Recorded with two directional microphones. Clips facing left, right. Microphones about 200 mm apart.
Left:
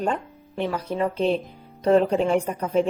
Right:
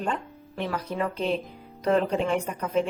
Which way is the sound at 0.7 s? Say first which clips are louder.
Left 3 dB; 25° left (ahead or behind).